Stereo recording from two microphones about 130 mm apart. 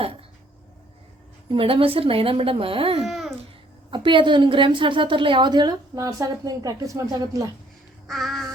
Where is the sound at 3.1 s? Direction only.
Centre (ahead or behind).